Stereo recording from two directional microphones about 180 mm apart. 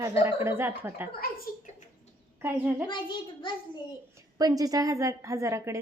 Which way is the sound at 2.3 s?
10° right (ahead or behind).